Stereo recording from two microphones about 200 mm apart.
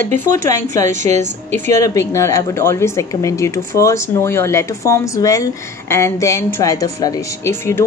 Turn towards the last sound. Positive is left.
turn(degrees=10)  # may be behind; listen again after turning